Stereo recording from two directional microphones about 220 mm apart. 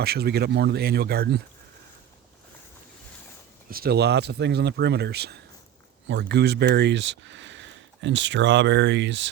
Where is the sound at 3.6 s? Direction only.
40° right (ahead or behind).